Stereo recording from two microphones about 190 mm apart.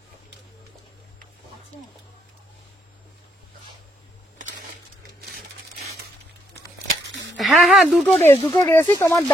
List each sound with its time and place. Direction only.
6.9 s a sound: 75° right (ahead or behind)
7.3 s speech: centre (ahead or behind)
8.4 s speech: 25° left (ahead or behind)
8.6 s speech: 15° left (ahead or behind)